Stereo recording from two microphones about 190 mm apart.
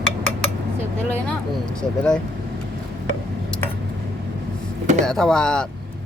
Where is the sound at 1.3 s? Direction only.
5° left (ahead or behind).